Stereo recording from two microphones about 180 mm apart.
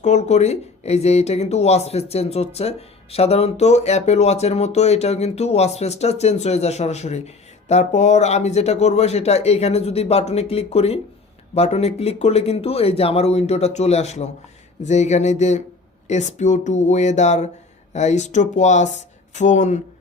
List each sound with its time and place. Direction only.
0.0 s speech: 40° left (ahead or behind)